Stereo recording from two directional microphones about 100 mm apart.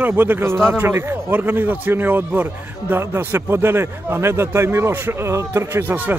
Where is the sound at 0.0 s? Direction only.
20° right (ahead or behind).